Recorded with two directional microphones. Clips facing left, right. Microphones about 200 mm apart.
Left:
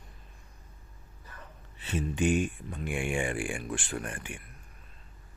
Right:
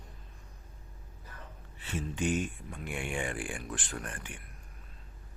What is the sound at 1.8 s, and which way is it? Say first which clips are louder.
Speech: left 5 dB; 20° left (ahead or behind).